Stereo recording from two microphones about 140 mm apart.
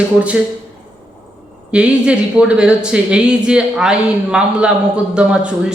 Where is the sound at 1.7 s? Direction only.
5° right (ahead or behind).